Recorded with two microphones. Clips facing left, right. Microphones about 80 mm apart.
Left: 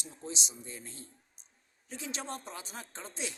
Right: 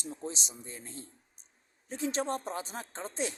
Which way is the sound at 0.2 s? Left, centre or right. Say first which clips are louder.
Right 2 dB; right.